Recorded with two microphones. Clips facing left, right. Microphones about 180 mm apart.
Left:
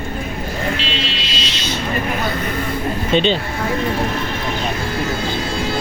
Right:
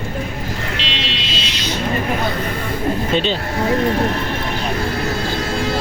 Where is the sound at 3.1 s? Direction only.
5° right (ahead or behind).